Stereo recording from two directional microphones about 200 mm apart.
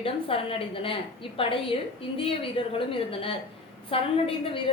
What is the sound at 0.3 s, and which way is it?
A woman's voice, 30° left (ahead or behind).